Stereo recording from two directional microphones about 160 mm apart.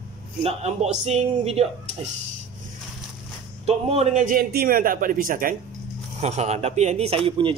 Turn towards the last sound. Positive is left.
turn(degrees=-35)  # may be behind; listen again after turning